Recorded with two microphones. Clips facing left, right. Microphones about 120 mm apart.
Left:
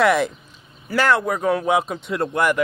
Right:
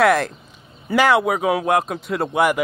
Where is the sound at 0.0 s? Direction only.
Centre (ahead or behind).